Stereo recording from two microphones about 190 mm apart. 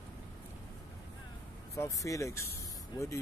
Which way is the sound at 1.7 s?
15° left (ahead or behind).